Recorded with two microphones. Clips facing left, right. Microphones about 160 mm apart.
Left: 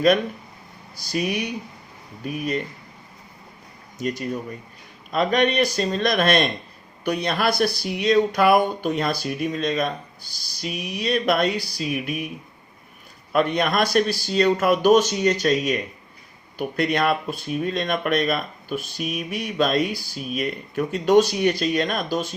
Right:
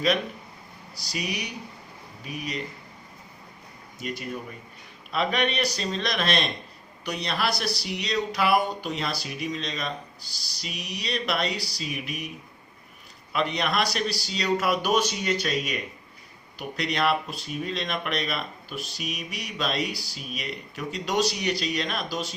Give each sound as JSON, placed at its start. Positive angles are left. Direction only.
{"t": 1.1, "sound": "speech", "side_deg": 55}
{"t": 3.9, "sound": "speech", "side_deg": 45}
{"t": 13.3, "sound": "speech", "side_deg": 50}